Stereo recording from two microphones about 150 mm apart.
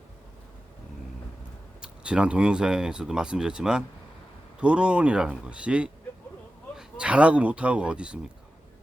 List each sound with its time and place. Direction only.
1.8 s speech: 5° right (ahead or behind)